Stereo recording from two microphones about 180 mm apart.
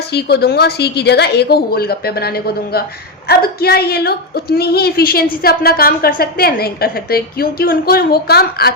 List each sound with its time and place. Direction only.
0.1 s a woman's voice: 65° left (ahead or behind)